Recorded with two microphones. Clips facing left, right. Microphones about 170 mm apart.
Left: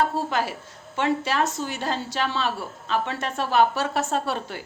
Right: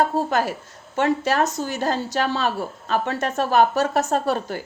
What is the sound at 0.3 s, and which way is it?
A woman's voice, 45° right (ahead or behind).